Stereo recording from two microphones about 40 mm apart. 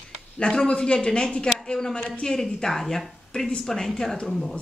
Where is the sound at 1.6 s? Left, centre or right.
Centre.